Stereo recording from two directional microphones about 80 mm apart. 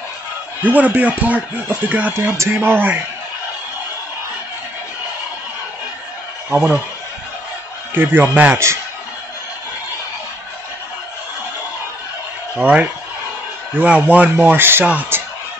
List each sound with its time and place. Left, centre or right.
0.6 s speech: right
2.3 s speech: right
6.5 s speech: right
7.9 s speech: right
12.5 s speech: centre